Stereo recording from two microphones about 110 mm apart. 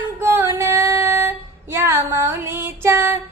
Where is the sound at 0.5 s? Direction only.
25° right (ahead or behind).